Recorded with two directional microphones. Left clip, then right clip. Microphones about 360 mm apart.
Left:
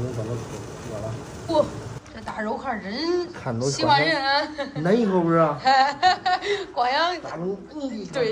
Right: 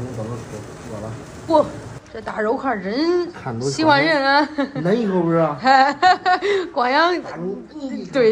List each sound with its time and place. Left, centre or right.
2.2 s a woman's voice: centre